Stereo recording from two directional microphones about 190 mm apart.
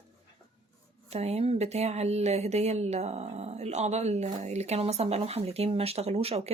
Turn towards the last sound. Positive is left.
turn(degrees=-35)  # may be behind; listen again after turning